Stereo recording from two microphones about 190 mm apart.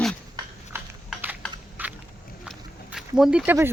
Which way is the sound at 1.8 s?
10° right (ahead or behind).